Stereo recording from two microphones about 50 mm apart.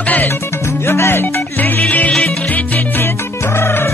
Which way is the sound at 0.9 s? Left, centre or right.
Left.